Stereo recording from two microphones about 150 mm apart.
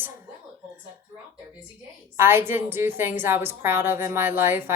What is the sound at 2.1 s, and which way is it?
A woman's voice, 15° right (ahead or behind).